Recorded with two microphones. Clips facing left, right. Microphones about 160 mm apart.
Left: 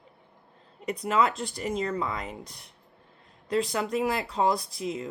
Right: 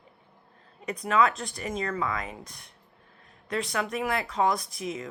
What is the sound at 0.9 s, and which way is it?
Speech, 30° left (ahead or behind).